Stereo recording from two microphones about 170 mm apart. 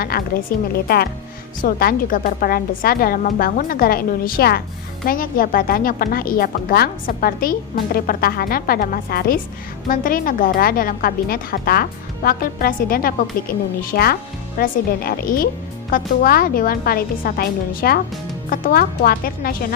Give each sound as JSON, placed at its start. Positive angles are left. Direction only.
{"t": 0.1, "sound": "a woman's voice", "side_deg": 60}